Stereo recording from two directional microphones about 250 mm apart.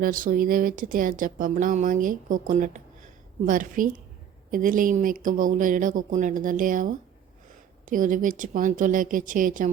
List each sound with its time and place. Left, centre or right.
0.0 s speech: right